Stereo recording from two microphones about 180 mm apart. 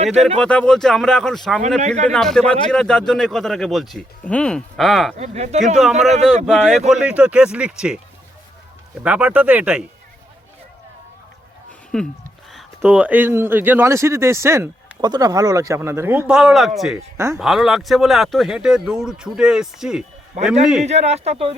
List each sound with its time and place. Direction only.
0.0 s speech: 35° right (ahead or behind)
0.3 s speech: 5° left (ahead or behind)
5.1 s speech: 35° right (ahead or behind)
5.8 s speech: centre (ahead or behind)
6.1 s speech: 40° right (ahead or behind)
6.4 s speech: centre (ahead or behind)
9.0 s speech: 5° right (ahead or behind)
11.9 s speech: 5° left (ahead or behind)
12.8 s speech: 10° right (ahead or behind)
17.2 s speech: 15° right (ahead or behind)
17.4 s speech: centre (ahead or behind)
20.8 s speech: 35° right (ahead or behind)